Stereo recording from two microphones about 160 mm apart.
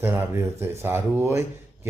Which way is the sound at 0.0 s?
15° right (ahead or behind).